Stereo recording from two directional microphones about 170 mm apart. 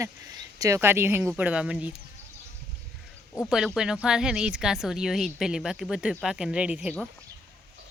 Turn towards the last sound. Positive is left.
turn(degrees=-5)  # may be behind; listen again after turning